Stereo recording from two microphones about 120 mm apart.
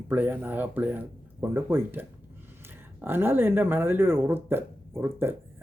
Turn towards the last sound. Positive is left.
turn(degrees=-20)  # may be behind; listen again after turning